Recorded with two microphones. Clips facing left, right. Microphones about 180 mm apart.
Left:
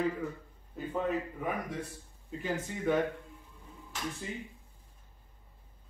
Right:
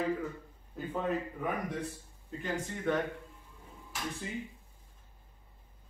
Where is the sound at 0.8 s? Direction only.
Centre (ahead or behind).